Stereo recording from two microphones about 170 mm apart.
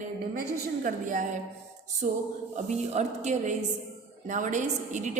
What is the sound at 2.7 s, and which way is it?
A man's voice, 40° right (ahead or behind).